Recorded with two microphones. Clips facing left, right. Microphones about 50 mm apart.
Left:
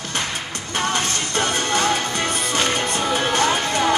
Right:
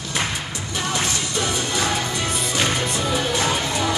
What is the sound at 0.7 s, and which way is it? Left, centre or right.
Music, left.